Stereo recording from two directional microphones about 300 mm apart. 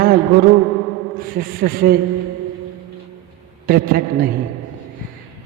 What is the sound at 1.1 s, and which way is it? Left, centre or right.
Speech, right.